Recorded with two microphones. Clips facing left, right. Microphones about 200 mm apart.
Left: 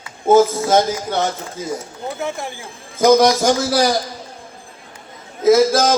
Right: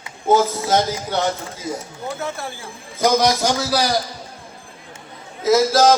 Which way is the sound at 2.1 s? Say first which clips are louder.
Left 4 dB; 15° left (ahead or behind).